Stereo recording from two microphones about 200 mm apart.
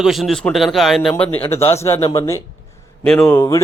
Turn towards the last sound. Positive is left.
turn(degrees=15)  # may be behind; listen again after turning